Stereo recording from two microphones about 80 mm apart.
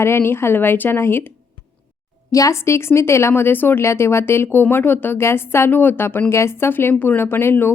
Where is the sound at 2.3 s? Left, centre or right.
Left.